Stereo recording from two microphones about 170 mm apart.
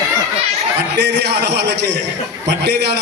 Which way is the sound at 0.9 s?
80° right.